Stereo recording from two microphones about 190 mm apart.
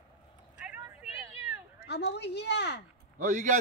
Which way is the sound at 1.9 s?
60° left (ahead or behind).